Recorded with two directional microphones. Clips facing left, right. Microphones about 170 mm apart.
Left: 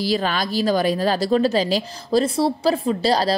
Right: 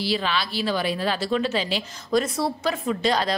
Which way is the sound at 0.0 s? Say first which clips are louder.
Left 4 dB; 45° left (ahead or behind).